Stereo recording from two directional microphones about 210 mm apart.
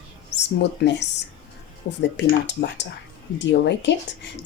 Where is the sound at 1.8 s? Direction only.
45° left (ahead or behind).